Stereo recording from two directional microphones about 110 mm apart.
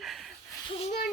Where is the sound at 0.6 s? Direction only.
60° left (ahead or behind).